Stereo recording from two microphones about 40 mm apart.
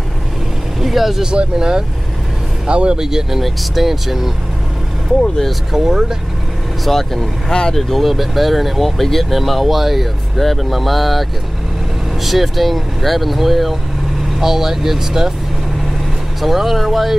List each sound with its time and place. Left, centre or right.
0.7 s vehicle: centre
1.2 s speech: right
3.0 s speech: centre
5.7 s speech: centre
6.8 s speech: centre
16.3 s speech: centre